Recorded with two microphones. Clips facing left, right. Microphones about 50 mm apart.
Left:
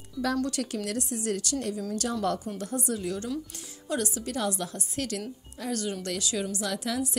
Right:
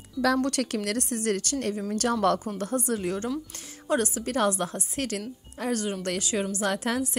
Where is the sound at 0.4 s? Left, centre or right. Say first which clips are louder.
Right 3 dB; right.